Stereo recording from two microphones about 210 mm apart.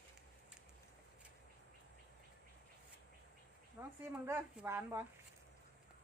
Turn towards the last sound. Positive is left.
turn(degrees=-10)  # may be behind; listen again after turning